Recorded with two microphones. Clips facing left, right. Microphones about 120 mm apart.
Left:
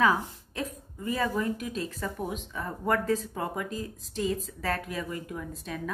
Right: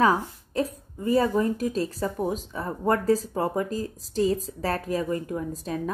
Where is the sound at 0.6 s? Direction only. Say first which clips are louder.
Right 8 dB; 35° right (ahead or behind).